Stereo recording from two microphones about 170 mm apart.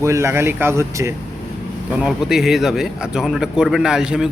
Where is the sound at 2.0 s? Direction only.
5° right (ahead or behind).